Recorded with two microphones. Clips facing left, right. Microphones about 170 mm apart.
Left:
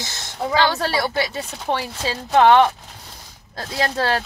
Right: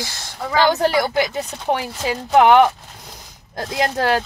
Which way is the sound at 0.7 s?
20° right (ahead or behind).